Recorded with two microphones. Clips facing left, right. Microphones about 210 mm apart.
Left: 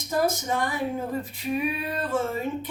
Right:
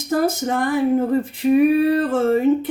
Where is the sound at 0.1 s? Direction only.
60° right (ahead or behind).